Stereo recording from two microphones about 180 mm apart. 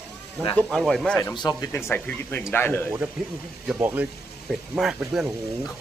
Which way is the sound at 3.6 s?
10° right (ahead or behind).